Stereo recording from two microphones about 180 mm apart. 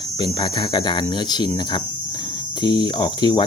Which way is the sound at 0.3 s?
25° left (ahead or behind).